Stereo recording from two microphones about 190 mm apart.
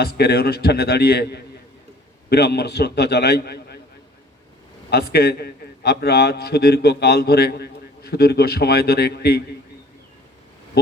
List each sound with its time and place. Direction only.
0.0 s a man's voice: 55° left (ahead or behind)
4.9 s a man's voice: 55° left (ahead or behind)